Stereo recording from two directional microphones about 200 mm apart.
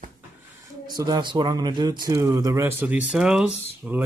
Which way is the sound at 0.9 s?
20° right (ahead or behind).